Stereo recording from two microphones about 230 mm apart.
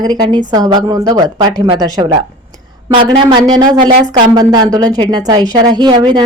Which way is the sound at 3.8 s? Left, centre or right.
Right.